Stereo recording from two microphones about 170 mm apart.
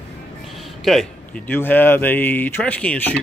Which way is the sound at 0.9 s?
Centre (ahead or behind).